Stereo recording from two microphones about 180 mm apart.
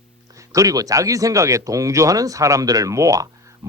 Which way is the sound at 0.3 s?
20° right (ahead or behind).